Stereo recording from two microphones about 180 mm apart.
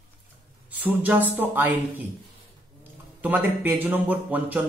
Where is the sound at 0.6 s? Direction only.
10° right (ahead or behind).